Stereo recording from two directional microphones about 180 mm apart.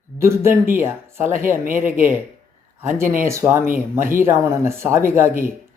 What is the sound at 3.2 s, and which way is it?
Speech, 15° right (ahead or behind).